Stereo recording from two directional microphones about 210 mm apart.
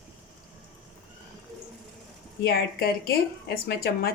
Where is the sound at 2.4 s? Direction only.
45° left (ahead or behind).